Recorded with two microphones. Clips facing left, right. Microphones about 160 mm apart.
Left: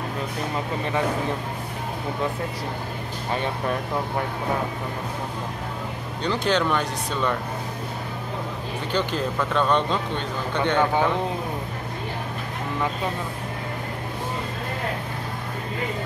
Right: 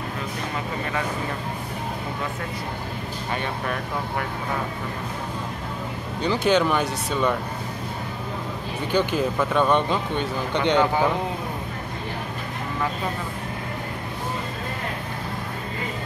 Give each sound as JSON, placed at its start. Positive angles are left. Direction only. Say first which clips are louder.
{"t": 6.2, "sound": "speech", "louder": "right 2 dB", "side_deg": -5}
{"t": 8.9, "sound": "speech", "louder": "right 3 dB", "side_deg": -10}